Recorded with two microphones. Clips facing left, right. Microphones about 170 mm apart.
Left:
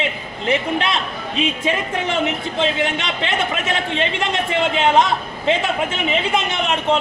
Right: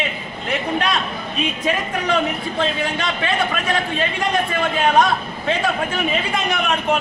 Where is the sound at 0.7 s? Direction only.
25° left (ahead or behind).